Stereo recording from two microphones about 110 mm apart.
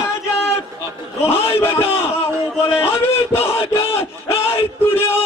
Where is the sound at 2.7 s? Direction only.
20° left (ahead or behind).